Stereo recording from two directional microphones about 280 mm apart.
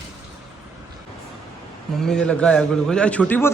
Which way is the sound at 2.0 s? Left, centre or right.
Centre.